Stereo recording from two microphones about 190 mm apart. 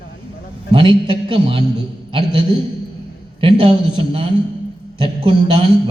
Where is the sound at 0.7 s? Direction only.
25° right (ahead or behind).